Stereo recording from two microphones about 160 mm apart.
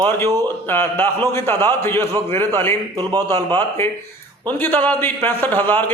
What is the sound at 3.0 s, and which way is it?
Speech, 25° right (ahead or behind).